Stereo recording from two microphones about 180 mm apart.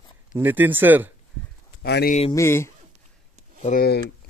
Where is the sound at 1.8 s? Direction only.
65° left (ahead or behind).